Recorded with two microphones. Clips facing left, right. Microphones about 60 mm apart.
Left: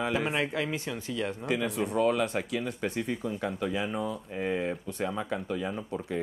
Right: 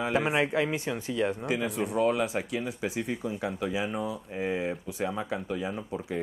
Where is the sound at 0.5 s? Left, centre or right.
Centre.